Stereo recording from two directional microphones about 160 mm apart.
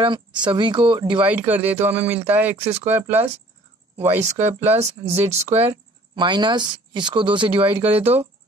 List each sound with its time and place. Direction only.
0.0 s speech: 30° right (ahead or behind)
1.2 s speech: 10° right (ahead or behind)
4.0 s speech: 15° right (ahead or behind)
4.4 s speech: 45° right (ahead or behind)
5.7 s a woman's voice: 25° right (ahead or behind)